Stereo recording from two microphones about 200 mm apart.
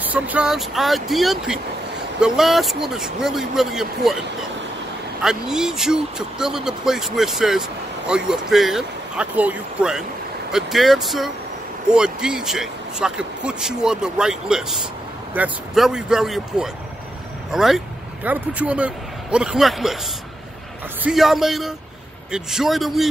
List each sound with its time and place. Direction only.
0.0 s speech: 5° right (ahead or behind)
5.2 s speech: 5° right (ahead or behind)
21.0 s speech: centre (ahead or behind)